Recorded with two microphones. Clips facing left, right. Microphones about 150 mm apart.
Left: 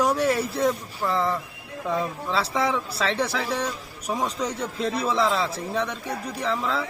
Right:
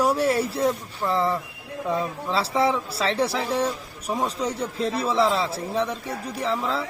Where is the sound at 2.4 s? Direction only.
30° right (ahead or behind).